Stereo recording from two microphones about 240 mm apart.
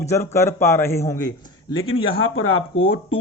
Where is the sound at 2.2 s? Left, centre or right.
Left.